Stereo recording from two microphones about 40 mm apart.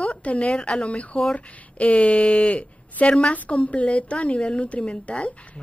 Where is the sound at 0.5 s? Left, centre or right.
Left.